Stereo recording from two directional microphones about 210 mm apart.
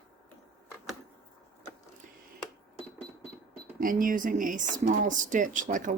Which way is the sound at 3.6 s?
40° right (ahead or behind).